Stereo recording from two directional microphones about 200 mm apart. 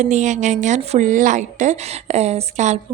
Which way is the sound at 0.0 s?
35° right (ahead or behind).